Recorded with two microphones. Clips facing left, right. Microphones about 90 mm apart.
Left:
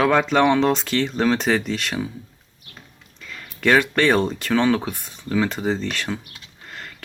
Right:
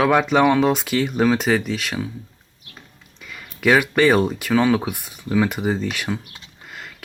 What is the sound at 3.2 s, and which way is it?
Speech, 10° right (ahead or behind).